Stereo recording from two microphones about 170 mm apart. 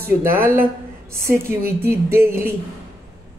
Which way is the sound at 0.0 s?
15° right (ahead or behind).